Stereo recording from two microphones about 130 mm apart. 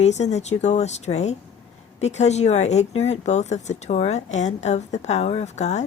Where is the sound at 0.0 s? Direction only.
60° left (ahead or behind).